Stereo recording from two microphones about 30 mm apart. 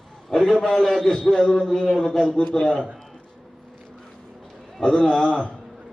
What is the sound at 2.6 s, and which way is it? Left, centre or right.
Speech, left.